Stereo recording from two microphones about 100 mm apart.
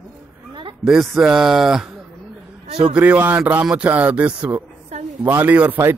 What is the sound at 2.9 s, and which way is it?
Speech, 15° right (ahead or behind).